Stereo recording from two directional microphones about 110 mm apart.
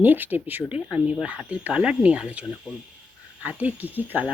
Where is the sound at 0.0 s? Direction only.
15° right (ahead or behind).